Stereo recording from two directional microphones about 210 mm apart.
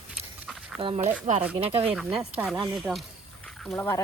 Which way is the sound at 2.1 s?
5° right (ahead or behind).